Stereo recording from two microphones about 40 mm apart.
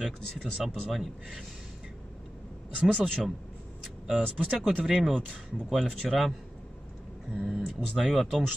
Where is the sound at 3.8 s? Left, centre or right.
Centre.